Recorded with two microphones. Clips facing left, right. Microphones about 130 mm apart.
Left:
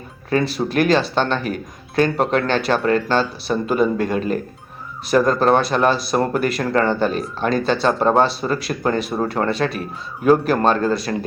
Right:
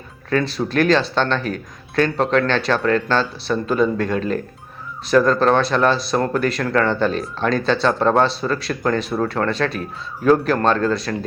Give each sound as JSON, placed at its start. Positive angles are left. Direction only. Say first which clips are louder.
{"t": 0.3, "sound": "a man's voice", "louder": "left 1 dB", "side_deg": 10}